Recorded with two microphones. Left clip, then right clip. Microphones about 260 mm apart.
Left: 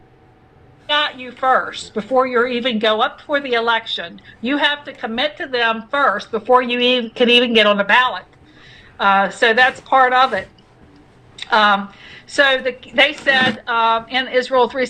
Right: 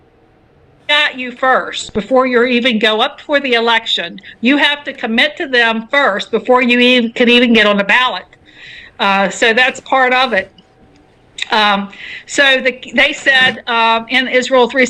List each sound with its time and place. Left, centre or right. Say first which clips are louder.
0.9 s a woman's voice: right 5 dB; right